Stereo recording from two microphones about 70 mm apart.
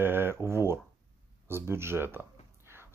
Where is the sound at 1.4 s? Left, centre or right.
Right.